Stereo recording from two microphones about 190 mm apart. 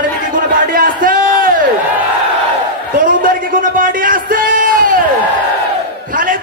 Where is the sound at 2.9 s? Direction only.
45° right (ahead or behind).